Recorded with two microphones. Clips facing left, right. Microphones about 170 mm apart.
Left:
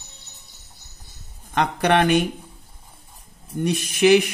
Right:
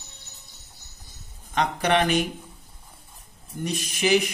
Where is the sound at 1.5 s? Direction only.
60° left (ahead or behind).